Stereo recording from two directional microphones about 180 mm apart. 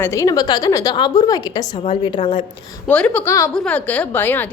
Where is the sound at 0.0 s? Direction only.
15° left (ahead or behind).